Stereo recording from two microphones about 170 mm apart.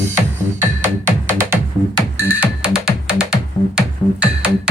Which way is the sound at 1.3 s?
15° right (ahead or behind).